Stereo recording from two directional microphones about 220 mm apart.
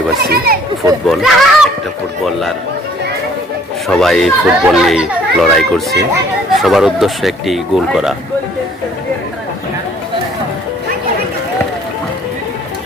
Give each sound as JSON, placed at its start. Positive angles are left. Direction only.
{"t": 0.2, "sound": "speech", "side_deg": -45}
{"t": 1.0, "sound": "a child's voice", "side_deg": 0}
{"t": 3.8, "sound": "a child's voice", "side_deg": 0}